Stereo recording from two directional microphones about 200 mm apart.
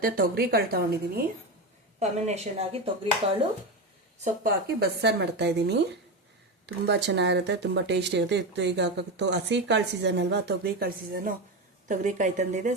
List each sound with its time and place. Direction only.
0.0 s a woman's voice: 50° right (ahead or behind)
2.0 s speech: 35° right (ahead or behind)
4.2 s speech: 50° right (ahead or behind)